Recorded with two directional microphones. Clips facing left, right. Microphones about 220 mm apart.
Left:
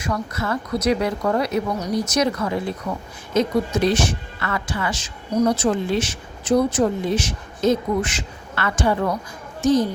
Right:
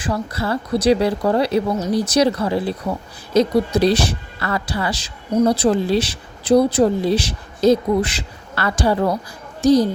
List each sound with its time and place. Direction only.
0.0 s a child's voice: 30° right (ahead or behind)